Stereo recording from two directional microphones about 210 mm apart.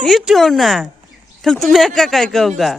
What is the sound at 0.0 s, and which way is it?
Speech, centre (ahead or behind).